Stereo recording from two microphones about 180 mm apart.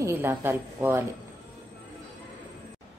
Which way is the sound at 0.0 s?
10° right (ahead or behind).